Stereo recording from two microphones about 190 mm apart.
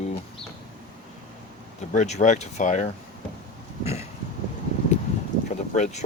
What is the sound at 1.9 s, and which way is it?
Speech, 40° left (ahead or behind).